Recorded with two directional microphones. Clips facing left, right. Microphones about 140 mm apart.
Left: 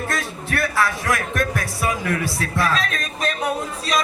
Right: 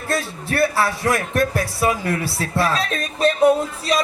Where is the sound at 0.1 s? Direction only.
30° right (ahead or behind).